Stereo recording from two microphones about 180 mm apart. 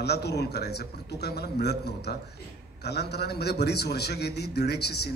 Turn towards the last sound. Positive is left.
turn(degrees=65)  # may be behind; listen again after turning